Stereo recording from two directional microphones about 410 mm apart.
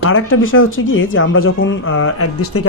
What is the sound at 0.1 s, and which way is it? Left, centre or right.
Speech, left.